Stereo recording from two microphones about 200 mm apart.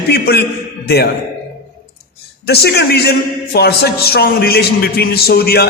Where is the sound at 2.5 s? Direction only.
55° left (ahead or behind).